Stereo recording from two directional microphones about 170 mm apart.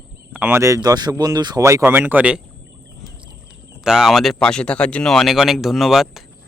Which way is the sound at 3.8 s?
5° right (ahead or behind).